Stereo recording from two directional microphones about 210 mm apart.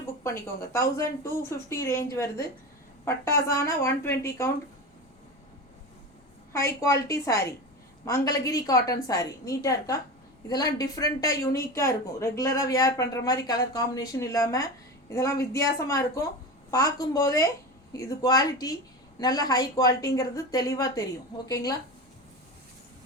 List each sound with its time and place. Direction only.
0.6 s a woman's voice: 15° left (ahead or behind)
6.5 s a woman's voice: 15° left (ahead or behind)